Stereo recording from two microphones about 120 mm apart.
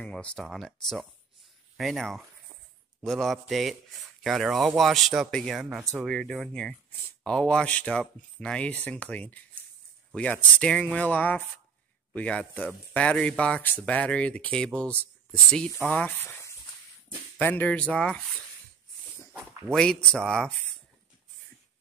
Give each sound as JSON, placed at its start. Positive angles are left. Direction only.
{"t": 0.0, "sound": "speech", "side_deg": 10}
{"t": 19.7, "sound": "speech", "side_deg": 5}